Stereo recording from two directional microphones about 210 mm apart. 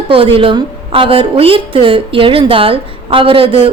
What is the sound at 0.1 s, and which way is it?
A woman's voice, 25° right (ahead or behind).